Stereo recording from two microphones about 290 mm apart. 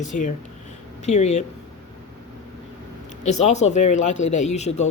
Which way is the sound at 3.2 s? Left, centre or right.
Left.